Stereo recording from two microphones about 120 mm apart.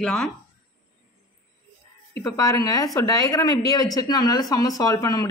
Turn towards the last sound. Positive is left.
turn(degrees=30)  # may be behind; listen again after turning